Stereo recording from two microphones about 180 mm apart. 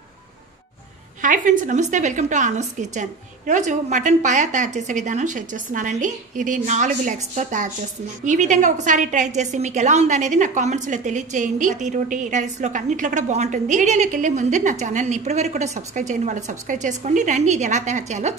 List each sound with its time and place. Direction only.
1.2 s a woman's voice: 45° right (ahead or behind)